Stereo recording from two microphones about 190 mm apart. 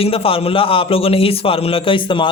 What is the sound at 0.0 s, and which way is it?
A man's voice, 30° left (ahead or behind).